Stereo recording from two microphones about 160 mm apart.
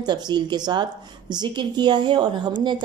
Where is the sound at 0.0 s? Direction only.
25° right (ahead or behind).